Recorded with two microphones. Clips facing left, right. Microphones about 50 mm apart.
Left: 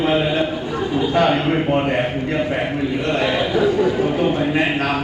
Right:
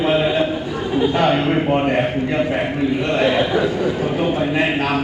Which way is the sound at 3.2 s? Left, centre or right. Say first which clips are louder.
Right 1 dB; centre.